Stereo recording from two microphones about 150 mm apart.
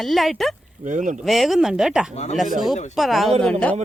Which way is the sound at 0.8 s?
55° right (ahead or behind).